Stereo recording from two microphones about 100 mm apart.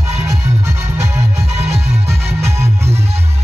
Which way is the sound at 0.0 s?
25° right (ahead or behind).